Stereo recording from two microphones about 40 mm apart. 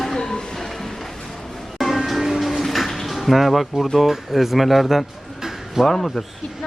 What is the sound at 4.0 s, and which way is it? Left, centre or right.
Speech, centre.